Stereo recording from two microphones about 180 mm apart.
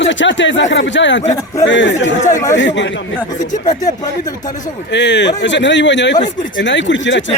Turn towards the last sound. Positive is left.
turn(degrees=85)